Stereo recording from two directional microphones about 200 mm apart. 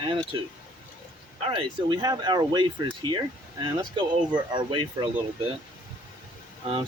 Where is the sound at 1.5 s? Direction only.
25° right (ahead or behind).